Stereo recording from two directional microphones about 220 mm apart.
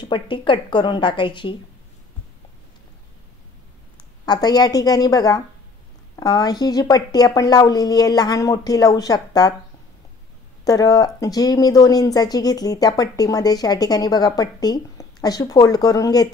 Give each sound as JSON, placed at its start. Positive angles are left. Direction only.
{"t": 0.0, "sound": "a woman's voice", "side_deg": 20}
{"t": 4.3, "sound": "speech", "side_deg": 20}
{"t": 10.6, "sound": "speech", "side_deg": 15}